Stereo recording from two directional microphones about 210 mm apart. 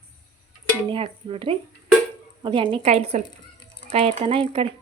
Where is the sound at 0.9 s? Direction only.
25° right (ahead or behind).